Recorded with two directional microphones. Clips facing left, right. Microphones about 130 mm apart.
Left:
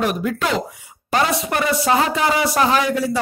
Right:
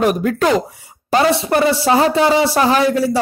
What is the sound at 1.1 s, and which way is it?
Speech, 30° right (ahead or behind).